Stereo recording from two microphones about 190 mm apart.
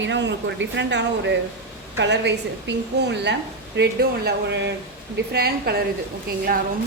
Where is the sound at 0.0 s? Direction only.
70° right (ahead or behind).